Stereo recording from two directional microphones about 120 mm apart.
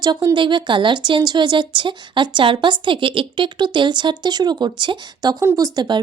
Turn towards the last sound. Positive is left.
turn(degrees=-35)  # may be behind; listen again after turning